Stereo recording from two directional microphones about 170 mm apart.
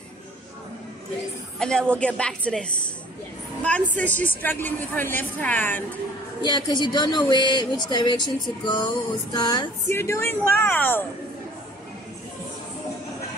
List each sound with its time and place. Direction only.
1.6 s a woman's voice: 5° left (ahead or behind)
3.6 s a woman's voice: 10° left (ahead or behind)
6.4 s a woman's voice: 25° left (ahead or behind)